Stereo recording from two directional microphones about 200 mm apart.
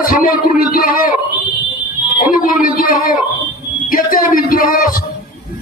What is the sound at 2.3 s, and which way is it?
A man's voice, 45° left (ahead or behind).